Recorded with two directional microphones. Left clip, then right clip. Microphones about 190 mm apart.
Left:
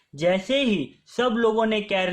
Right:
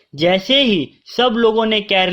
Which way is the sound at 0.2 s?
35° right (ahead or behind).